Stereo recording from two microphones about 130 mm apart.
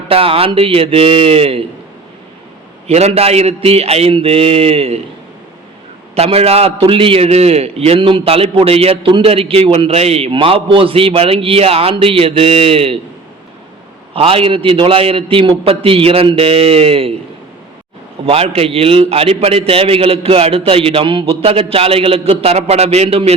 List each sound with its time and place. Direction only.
0.1 s a man's voice: 45° right (ahead or behind)
2.8 s a man's voice: 55° right (ahead or behind)
6.1 s a man's voice: 50° right (ahead or behind)
14.1 s a man's voice: 45° right (ahead or behind)
18.3 s a man's voice: 50° right (ahead or behind)